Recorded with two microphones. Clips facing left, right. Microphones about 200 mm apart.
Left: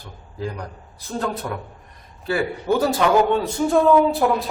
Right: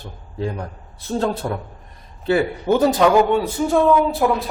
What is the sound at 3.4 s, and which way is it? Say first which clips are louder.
Speech: even; centre (ahead or behind).